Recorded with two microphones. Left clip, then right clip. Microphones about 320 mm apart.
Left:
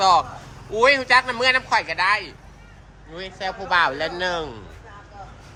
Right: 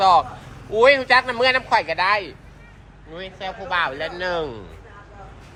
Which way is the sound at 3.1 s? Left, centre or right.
Centre.